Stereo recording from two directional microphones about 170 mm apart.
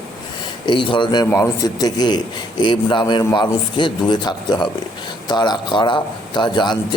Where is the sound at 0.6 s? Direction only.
30° left (ahead or behind).